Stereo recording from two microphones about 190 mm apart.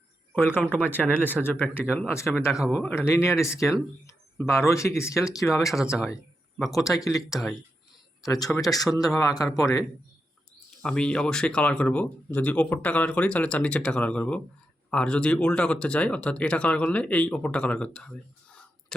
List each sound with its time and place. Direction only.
0.3 s speech: 10° left (ahead or behind)
2.3 s speech: centre (ahead or behind)
3.4 s speech: 15° left (ahead or behind)
8.5 s speech: 20° left (ahead or behind)
10.8 s speech: 5° left (ahead or behind)